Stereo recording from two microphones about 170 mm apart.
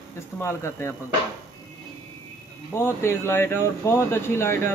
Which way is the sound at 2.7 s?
15° left (ahead or behind).